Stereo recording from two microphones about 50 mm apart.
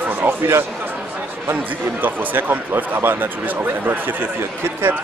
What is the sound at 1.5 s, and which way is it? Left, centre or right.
Speech, right.